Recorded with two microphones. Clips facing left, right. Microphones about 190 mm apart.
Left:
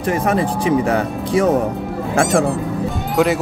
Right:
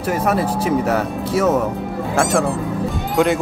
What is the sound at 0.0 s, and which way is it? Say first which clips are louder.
Speech: left 1 dB; 5° right (ahead or behind).